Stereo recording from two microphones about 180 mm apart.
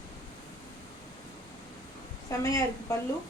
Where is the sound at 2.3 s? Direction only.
15° left (ahead or behind).